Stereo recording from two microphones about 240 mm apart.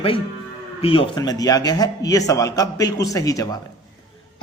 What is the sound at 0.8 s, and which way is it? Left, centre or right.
A man's voice, left.